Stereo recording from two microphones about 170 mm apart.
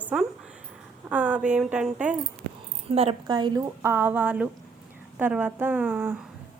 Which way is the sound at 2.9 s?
35° right (ahead or behind).